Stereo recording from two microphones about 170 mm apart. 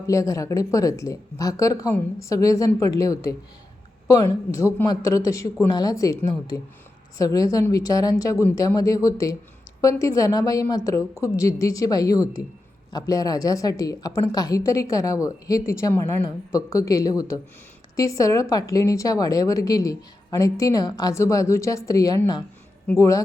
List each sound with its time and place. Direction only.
0.1 s speech: 20° left (ahead or behind)